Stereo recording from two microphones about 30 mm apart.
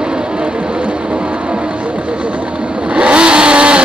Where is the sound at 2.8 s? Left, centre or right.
Right.